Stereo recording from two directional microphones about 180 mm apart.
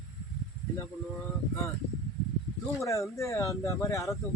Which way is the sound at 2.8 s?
15° left (ahead or behind).